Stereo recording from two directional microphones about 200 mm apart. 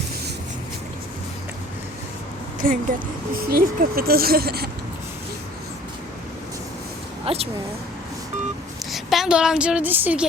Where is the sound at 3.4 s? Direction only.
50° right (ahead or behind).